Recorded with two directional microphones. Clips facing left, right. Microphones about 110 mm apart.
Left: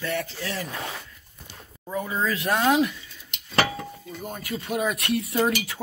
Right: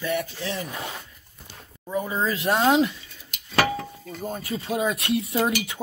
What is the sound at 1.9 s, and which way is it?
Speech, 20° right (ahead or behind).